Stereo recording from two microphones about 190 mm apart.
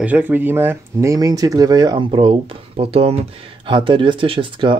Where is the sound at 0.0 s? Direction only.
10° right (ahead or behind).